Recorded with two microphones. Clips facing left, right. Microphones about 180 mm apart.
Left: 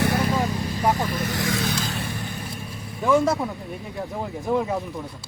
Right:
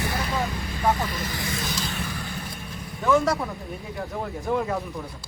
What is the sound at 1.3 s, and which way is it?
Vehicle, 80° left.